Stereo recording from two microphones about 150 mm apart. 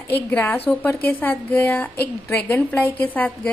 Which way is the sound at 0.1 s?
10° left (ahead or behind).